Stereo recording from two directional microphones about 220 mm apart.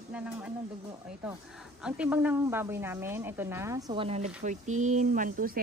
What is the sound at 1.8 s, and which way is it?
A woman's voice, 5° right (ahead or behind).